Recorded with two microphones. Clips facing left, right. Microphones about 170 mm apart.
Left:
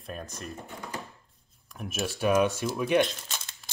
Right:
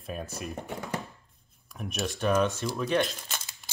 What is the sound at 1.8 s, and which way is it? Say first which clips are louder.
Speech: left 1 dB; centre (ahead or behind).